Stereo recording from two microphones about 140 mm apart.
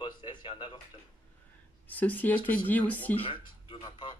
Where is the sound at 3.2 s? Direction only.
35° left (ahead or behind).